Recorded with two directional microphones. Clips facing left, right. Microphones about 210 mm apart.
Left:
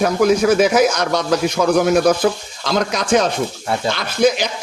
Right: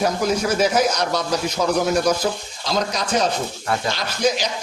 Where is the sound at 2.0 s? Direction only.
55° left (ahead or behind); by 3.2 s 80° left.